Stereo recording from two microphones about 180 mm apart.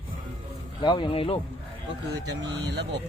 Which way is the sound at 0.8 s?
30° left (ahead or behind).